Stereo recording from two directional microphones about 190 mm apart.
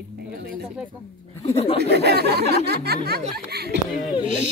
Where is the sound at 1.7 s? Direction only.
60° right (ahead or behind).